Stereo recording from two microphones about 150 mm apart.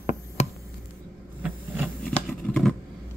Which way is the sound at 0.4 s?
50° left (ahead or behind).